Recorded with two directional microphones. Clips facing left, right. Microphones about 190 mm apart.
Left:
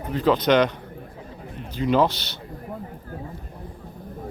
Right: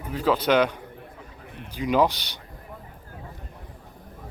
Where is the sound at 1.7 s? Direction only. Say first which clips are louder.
Left 2 dB; 10° right (ahead or behind).